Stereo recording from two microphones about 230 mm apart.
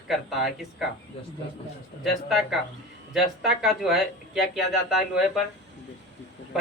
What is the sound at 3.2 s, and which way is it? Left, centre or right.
A man's voice, centre.